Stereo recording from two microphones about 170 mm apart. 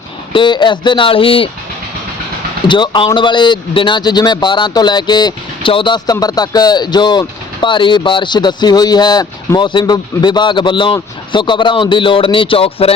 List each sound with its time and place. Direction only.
0.3 s speech: 25° left (ahead or behind)
2.6 s speech: 25° left (ahead or behind)